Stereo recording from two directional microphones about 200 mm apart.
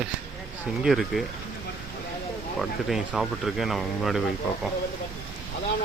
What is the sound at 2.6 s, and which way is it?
Speech, centre (ahead or behind).